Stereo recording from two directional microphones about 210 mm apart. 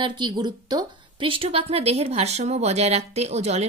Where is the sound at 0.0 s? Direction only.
20° right (ahead or behind).